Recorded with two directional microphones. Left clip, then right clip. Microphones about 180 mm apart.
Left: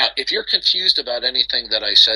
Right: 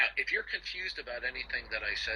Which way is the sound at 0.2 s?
50° left (ahead or behind).